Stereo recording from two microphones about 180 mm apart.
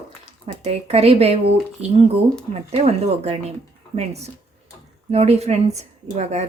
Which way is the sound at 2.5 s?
35° right (ahead or behind).